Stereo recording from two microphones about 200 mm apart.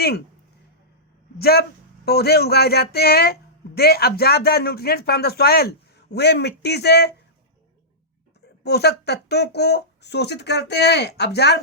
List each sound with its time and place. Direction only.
1.4 s speech: 50° left (ahead or behind)
8.6 s speech: 55° left (ahead or behind)